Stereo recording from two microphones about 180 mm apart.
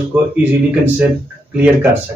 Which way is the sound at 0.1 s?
10° right (ahead or behind).